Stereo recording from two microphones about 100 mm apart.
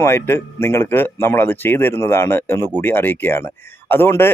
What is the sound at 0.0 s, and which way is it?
Speech, 25° left (ahead or behind).